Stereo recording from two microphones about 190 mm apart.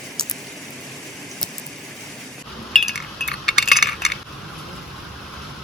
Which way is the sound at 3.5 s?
Centre (ahead or behind).